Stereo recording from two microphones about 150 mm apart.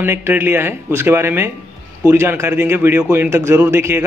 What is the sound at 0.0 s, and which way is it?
A man's voice, 15° right (ahead or behind).